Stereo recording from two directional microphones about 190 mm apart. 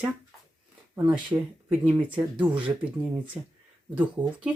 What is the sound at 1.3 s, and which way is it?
Speech, 10° right (ahead or behind).